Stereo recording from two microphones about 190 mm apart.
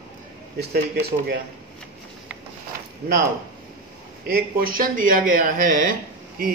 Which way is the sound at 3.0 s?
45° right (ahead or behind).